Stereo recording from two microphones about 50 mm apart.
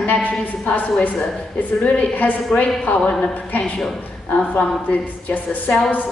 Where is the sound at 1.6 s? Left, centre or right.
Left.